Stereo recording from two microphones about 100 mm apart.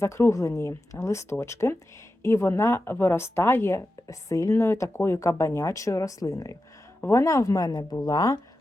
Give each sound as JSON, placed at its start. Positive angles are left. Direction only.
{"t": 0.0, "sound": "speech", "side_deg": 30}